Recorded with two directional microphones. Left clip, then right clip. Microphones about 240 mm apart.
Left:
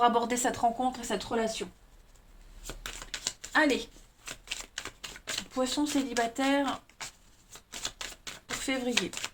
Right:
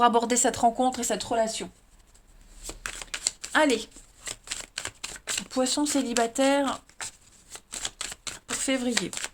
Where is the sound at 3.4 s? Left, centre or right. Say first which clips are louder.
Right 3 dB; right.